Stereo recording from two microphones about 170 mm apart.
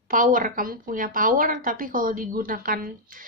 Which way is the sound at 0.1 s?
50° right (ahead or behind).